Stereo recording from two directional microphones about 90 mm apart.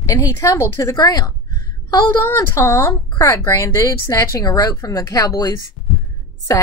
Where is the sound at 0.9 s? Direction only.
50° left (ahead or behind).